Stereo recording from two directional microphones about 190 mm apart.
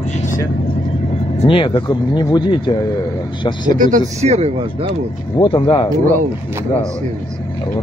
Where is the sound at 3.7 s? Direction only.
45° right (ahead or behind).